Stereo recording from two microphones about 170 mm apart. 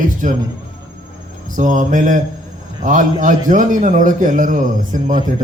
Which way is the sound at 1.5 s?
50° right (ahead or behind).